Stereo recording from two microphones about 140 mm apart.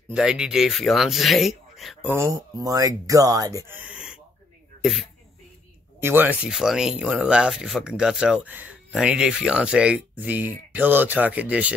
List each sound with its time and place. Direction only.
0.1 s speech: 5° right (ahead or behind)
2.0 s speech: 20° right (ahead or behind)
5.9 s speech: 15° right (ahead or behind)